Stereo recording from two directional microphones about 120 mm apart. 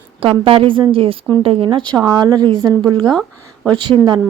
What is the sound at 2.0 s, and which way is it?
Speech, 35° right (ahead or behind).